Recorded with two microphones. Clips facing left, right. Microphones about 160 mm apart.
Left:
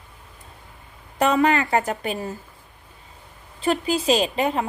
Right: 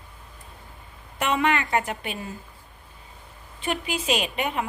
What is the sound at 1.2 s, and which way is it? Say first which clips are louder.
A woman's voice: left 5 dB; 35° left (ahead or behind).